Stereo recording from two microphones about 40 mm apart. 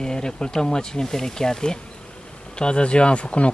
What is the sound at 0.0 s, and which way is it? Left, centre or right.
Speech, centre.